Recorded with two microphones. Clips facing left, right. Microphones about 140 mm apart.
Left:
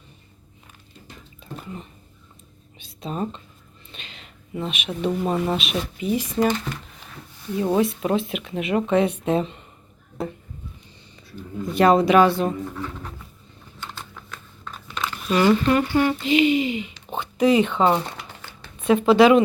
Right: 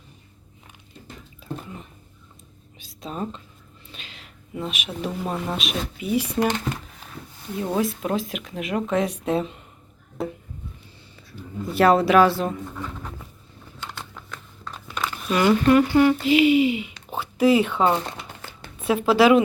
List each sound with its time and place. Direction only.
2.7 s whispering: centre (ahead or behind)
3.9 s speech: centre (ahead or behind)
6.1 s speech: 10° right (ahead or behind)
7.8 s speech: centre (ahead or behind)
11.6 s speech: 5° right (ahead or behind)
14.6 s a sound: 10° right (ahead or behind)
15.4 s speech: 5° right (ahead or behind)